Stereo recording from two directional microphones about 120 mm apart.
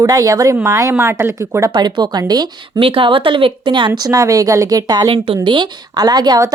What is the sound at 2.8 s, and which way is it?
Speech, 50° right (ahead or behind).